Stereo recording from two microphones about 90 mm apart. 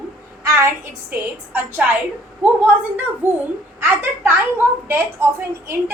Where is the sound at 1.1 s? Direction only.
25° right (ahead or behind).